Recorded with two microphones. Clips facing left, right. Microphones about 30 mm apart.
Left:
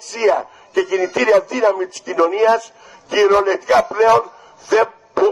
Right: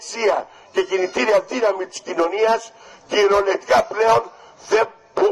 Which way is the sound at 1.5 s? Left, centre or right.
Centre.